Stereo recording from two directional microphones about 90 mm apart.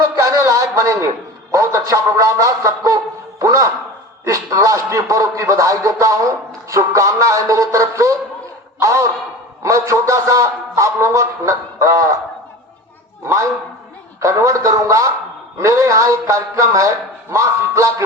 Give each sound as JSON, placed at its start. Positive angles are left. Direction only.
{"t": 0.2, "sound": "a sound", "side_deg": -35}
{"t": 1.5, "sound": "speech", "side_deg": -35}
{"t": 13.2, "sound": "speech", "side_deg": -30}